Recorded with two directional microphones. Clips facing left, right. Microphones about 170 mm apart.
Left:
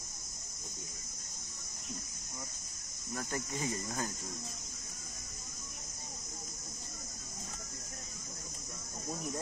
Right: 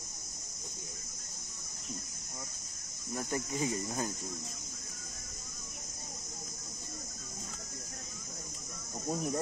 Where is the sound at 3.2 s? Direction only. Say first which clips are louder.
Right 4 dB; 15° right (ahead or behind).